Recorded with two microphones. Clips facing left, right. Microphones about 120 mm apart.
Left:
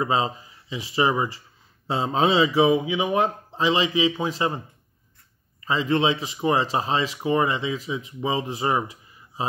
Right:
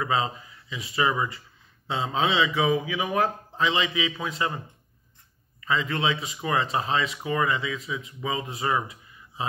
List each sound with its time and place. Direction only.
0.0 s speech: 30° left (ahead or behind)
5.6 s speech: 30° left (ahead or behind)